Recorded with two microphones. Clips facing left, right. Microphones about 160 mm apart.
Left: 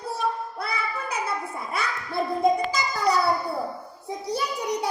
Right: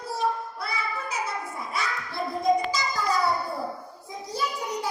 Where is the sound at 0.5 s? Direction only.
60° left (ahead or behind).